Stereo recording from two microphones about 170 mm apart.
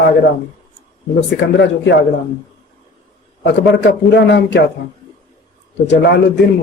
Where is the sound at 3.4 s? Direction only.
90° left.